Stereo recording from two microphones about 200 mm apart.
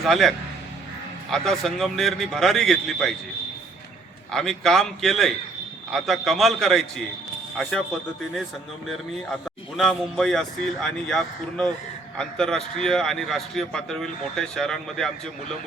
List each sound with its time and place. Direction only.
0.0 s a man's voice: centre (ahead or behind)
4.3 s a man's voice: centre (ahead or behind)
8.9 s a man's voice: centre (ahead or behind)